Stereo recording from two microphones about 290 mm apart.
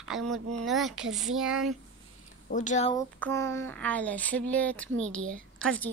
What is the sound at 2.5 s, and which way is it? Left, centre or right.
Speech, left.